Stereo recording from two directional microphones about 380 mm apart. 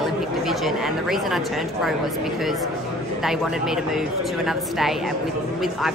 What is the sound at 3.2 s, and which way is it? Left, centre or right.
A woman's voice, centre.